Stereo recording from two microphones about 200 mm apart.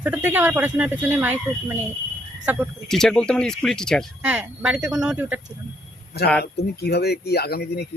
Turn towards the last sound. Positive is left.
turn(degrees=55)  # may be behind; listen again after turning